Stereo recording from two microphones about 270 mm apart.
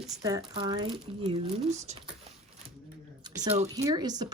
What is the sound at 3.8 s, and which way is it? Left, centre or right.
Speech, centre.